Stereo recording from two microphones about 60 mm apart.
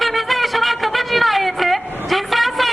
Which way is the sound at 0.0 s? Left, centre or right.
Centre.